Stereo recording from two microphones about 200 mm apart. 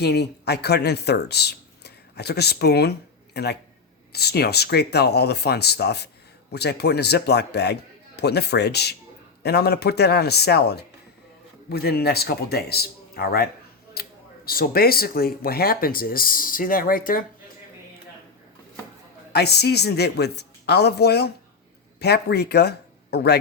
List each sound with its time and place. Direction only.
0.0 s a man's voice: 55° left (ahead or behind)
19.3 s a man's voice: 55° left (ahead or behind)